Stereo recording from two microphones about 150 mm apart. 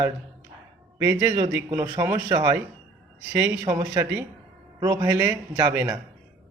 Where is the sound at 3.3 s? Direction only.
15° right (ahead or behind).